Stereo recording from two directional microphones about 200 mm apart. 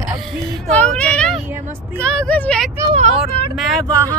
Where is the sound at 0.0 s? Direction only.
Centre (ahead or behind).